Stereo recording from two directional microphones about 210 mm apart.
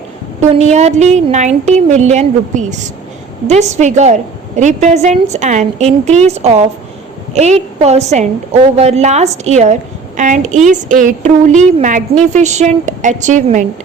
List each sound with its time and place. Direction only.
0.3 s a woman's voice: 30° right (ahead or behind)